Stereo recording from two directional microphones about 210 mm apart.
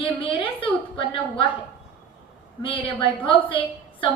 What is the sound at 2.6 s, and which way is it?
Speech, 25° left (ahead or behind).